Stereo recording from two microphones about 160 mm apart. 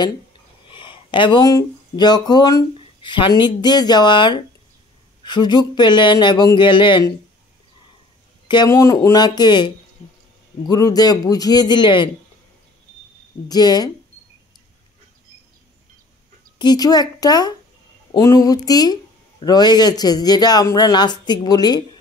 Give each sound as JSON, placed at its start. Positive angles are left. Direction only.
{"t": 0.7, "sound": "speech", "side_deg": 30}
{"t": 8.6, "sound": "speech", "side_deg": 20}
{"t": 10.7, "sound": "speech", "side_deg": 25}
{"t": 13.5, "sound": "speech", "side_deg": 25}
{"t": 16.5, "sound": "speech", "side_deg": 25}